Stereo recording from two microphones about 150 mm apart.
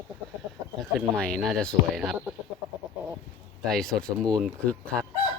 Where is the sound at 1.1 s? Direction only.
5° left (ahead or behind).